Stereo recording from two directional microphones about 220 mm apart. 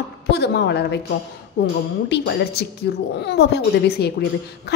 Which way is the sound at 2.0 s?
50° left (ahead or behind).